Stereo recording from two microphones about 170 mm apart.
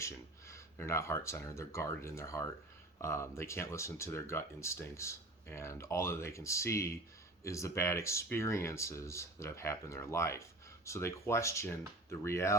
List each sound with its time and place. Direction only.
0.0 s speech: 15° left (ahead or behind)